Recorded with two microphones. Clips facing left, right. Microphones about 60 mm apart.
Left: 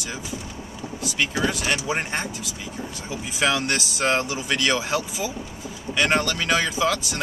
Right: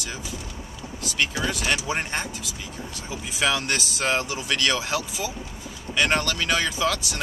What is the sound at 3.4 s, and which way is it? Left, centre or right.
Speech, centre.